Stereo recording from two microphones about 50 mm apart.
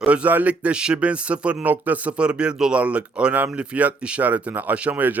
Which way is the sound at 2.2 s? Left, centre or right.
Centre.